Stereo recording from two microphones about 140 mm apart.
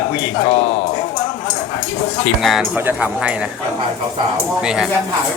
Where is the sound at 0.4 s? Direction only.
50° left (ahead or behind).